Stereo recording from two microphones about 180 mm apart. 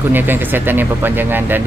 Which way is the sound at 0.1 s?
10° right (ahead or behind).